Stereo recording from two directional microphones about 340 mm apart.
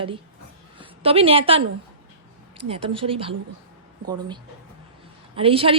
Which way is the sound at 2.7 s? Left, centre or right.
Centre.